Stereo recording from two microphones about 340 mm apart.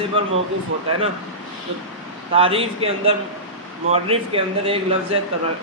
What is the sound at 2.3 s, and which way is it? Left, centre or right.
Speech, centre.